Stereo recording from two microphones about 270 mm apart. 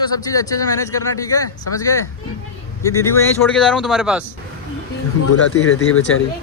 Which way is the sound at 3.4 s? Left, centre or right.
Centre.